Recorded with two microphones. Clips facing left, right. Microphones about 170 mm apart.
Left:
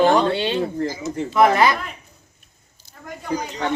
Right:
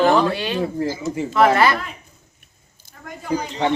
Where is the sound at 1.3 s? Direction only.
15° left (ahead or behind).